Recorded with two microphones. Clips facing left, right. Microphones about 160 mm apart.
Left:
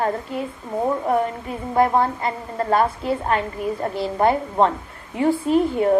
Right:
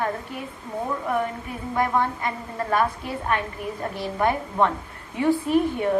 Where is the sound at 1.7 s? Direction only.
30° left (ahead or behind).